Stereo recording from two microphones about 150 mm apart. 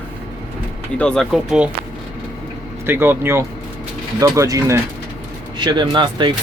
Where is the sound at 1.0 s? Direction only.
5° left (ahead or behind).